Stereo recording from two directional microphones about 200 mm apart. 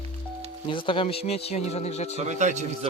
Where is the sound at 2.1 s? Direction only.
35° right (ahead or behind).